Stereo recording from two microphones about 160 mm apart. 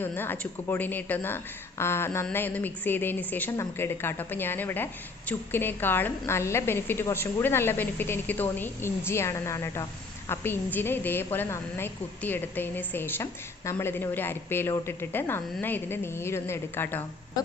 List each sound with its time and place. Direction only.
0.0 s a woman's voice: 15° left (ahead or behind)